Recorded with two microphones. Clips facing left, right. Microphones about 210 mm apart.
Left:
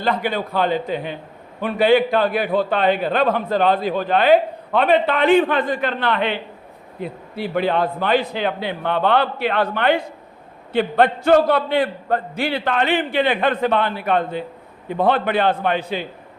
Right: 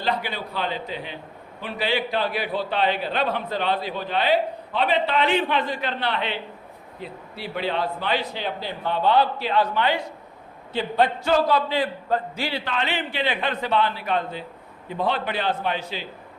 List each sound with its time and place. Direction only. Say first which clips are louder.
0.0 s a man's voice: left 6 dB; 50° left (ahead or behind)